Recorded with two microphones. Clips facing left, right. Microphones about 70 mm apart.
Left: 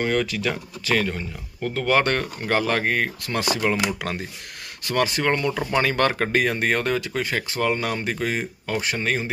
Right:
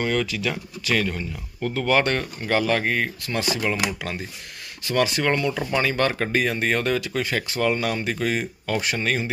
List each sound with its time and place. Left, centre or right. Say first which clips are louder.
0.0 s speech: left 1 dB; left
0.9 s speech: even; centre
1.7 s speech: left 1 dB; left
4.9 s speech: even; left